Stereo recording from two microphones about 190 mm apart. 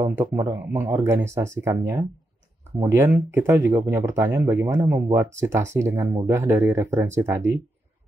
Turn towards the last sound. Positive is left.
turn(degrees=-15)  # may be behind; listen again after turning